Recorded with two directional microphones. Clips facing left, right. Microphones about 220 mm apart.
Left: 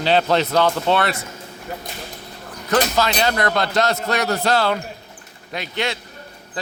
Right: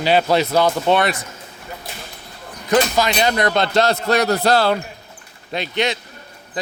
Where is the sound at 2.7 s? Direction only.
15° right (ahead or behind); by 4.7 s 35° right (ahead or behind).